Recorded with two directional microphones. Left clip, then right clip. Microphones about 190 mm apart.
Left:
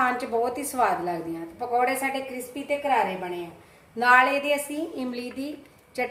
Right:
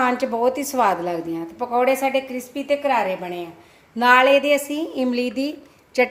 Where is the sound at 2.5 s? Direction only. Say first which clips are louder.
Right 7 dB; 45° right (ahead or behind).